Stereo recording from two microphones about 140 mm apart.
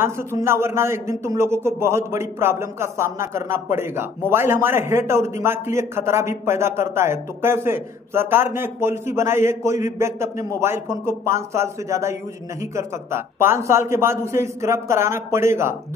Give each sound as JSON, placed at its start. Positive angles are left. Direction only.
{"t": 0.0, "sound": "speech", "side_deg": -20}